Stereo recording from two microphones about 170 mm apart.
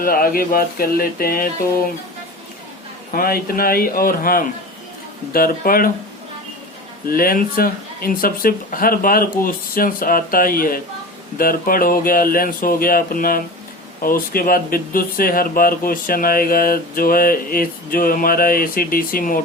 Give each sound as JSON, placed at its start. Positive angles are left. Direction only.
{"t": 0.0, "sound": "speech", "side_deg": 60}
{"t": 3.1, "sound": "speech", "side_deg": 60}
{"t": 7.1, "sound": "speech", "side_deg": 60}